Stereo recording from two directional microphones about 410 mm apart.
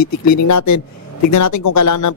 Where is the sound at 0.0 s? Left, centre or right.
Left.